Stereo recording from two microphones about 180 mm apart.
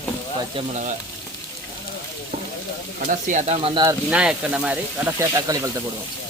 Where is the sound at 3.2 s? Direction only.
40° right (ahead or behind).